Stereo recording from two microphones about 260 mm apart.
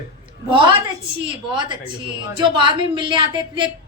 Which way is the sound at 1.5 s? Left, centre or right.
Centre.